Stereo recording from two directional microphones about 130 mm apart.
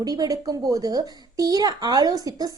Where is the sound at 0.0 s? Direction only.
30° right (ahead or behind).